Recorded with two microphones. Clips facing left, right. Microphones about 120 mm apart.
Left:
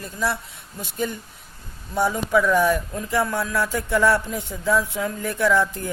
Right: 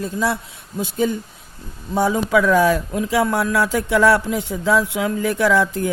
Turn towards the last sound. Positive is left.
turn(degrees=-90)